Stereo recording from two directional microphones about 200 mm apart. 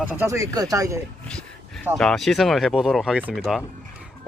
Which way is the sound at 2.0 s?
Centre (ahead or behind).